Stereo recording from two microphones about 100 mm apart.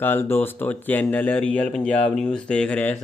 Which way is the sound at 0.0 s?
20° left (ahead or behind).